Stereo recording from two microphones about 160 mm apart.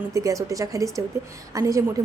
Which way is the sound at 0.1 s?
20° right (ahead or behind).